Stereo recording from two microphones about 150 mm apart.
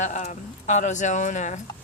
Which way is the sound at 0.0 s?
55° left (ahead or behind).